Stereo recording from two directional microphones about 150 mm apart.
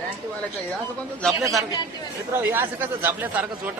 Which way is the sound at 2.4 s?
15° right (ahead or behind).